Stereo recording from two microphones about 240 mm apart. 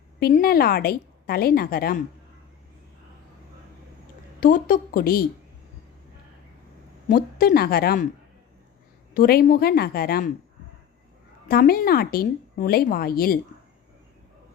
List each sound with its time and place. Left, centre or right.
0.2 s a woman's voice: left
4.4 s a woman's voice: left
7.1 s a woman's voice: left
9.1 s a woman's voice: left
11.4 s a woman's voice: left